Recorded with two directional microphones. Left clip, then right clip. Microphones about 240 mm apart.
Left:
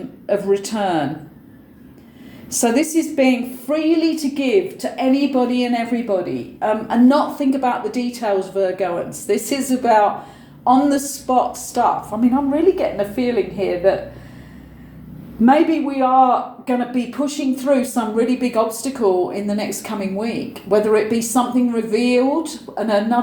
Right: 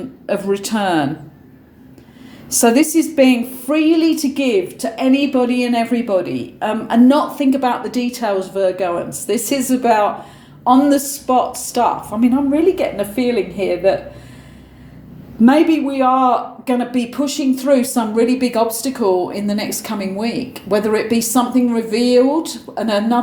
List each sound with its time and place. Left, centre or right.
0.3 s speech: right
2.5 s speech: right
15.4 s speech: right